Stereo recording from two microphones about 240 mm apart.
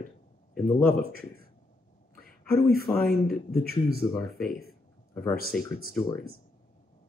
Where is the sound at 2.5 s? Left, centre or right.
Left.